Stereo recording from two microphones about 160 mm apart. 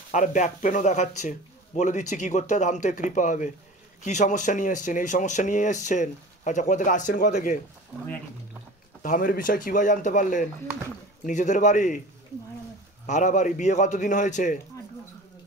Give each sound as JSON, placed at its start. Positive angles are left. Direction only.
{"t": 0.1, "sound": "speech", "side_deg": 50}
{"t": 9.0, "sound": "speech", "side_deg": 60}
{"t": 13.0, "sound": "speech", "side_deg": 50}